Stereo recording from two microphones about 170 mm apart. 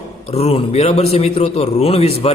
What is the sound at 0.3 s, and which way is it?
A man's voice, 35° left (ahead or behind).